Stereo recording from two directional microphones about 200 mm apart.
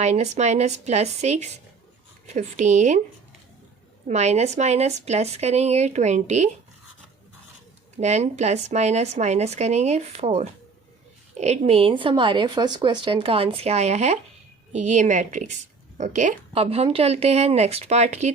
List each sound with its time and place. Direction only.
0.0 s speech: 35° right (ahead or behind)
4.1 s speech: 35° right (ahead or behind)
8.0 s a woman's voice: 35° right (ahead or behind)